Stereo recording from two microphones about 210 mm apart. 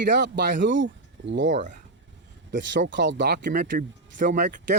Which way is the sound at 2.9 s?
60° right (ahead or behind).